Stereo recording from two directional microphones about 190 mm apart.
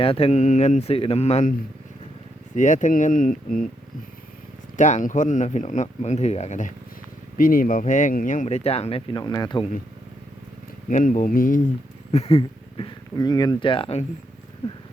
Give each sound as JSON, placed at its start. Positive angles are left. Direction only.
{"t": 0.0, "sound": "speech", "side_deg": 30}
{"t": 2.6, "sound": "speech", "side_deg": 40}
{"t": 4.8, "sound": "speech", "side_deg": 40}
{"t": 10.8, "sound": "speech", "side_deg": 45}
{"t": 12.1, "sound": "speech", "side_deg": 30}